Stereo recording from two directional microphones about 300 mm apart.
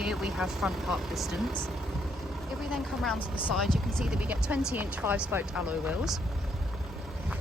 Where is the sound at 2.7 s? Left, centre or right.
Centre.